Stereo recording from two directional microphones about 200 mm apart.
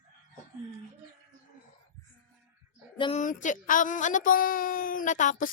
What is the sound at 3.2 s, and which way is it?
Speech, 40° left (ahead or behind).